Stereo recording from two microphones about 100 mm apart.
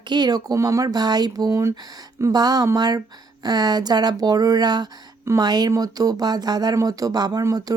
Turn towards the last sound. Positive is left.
turn(degrees=-35)  # may be behind; listen again after turning